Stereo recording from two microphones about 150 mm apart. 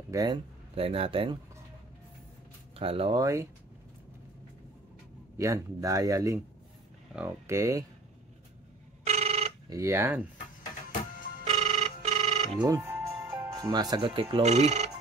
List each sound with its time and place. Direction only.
0.1 s a man's voice: 25° right (ahead or behind)
0.7 s a man's voice: 40° right (ahead or behind)
2.7 s speech: 40° right (ahead or behind)
3.2 s speech: 20° right (ahead or behind)
5.4 s speech: 20° right (ahead or behind)
9.0 s a sound: 45° right (ahead or behind)
9.7 s speech: 20° right (ahead or behind)
11.4 s a sound: 45° right (ahead or behind)
12.6 s music: 20° right (ahead or behind)
14.4 s speech: 50° right (ahead or behind)